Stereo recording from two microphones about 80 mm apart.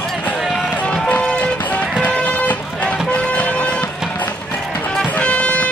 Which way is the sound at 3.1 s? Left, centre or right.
Centre.